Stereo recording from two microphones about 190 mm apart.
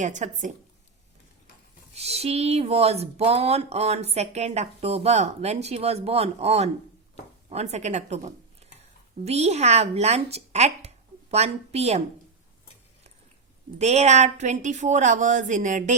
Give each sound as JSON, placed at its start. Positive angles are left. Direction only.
{"t": 0.0, "sound": "speech", "side_deg": -40}
{"t": 1.9, "sound": "speech", "side_deg": -35}
{"t": 13.7, "sound": "speech", "side_deg": -35}